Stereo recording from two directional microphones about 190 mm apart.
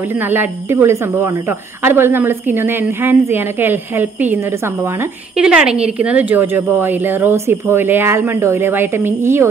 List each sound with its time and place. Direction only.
0.3 s speech: 10° right (ahead or behind)
5.4 s speech: 5° right (ahead or behind)